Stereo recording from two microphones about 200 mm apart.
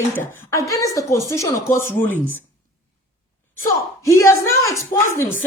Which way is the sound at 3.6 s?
15° left (ahead or behind).